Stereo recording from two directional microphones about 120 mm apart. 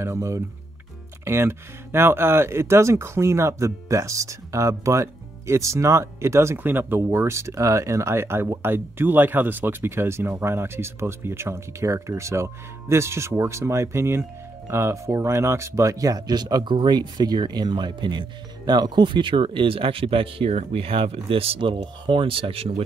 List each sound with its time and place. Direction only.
0.0 s speech: 25° right (ahead or behind); by 22.7 s 50° right (ahead or behind)